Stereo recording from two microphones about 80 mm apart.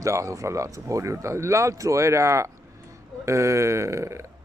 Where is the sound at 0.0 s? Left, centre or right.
Right.